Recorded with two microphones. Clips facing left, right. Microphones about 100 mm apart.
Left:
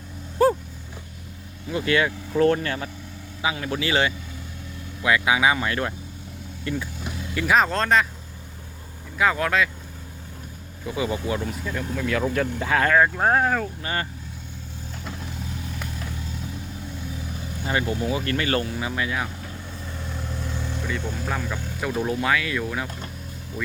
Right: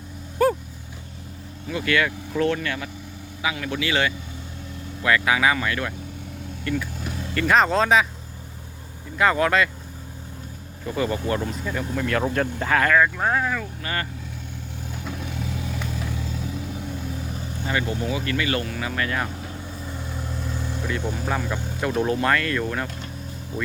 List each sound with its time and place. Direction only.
0.4 s dog: 30° left (ahead or behind)
1.7 s speech: 25° left (ahead or behind)
2.4 s speech: 35° left (ahead or behind)
5.0 s speech: 15° left (ahead or behind)
7.3 s speech: 5° left (ahead or behind)
9.1 s speech: centre (ahead or behind)
10.8 s speech: 10° left (ahead or behind)
11.4 s speech: centre (ahead or behind)
12.6 s speech: 25° left (ahead or behind); by 13.7 s 45° left (ahead or behind)
13.8 s speech: 25° left (ahead or behind)
17.7 s speech: 25° left (ahead or behind)
18.9 s speech: 10° left (ahead or behind)
19.9 s vehicle: 10° right (ahead or behind)
21.0 s speech: 5° right (ahead or behind)